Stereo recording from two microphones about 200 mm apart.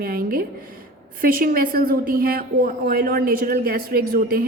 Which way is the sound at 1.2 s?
45° right (ahead or behind).